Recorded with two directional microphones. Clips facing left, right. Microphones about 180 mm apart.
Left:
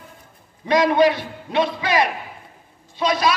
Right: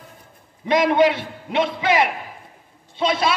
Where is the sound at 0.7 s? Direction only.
20° right (ahead or behind).